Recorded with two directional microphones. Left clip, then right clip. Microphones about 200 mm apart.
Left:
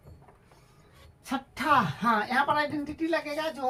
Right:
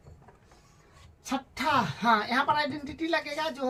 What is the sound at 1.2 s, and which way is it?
A woman's voice, 10° left (ahead or behind).